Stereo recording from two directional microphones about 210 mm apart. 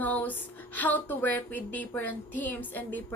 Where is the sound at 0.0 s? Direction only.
10° left (ahead or behind).